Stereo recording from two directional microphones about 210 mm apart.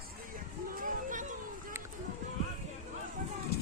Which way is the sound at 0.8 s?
40° right (ahead or behind).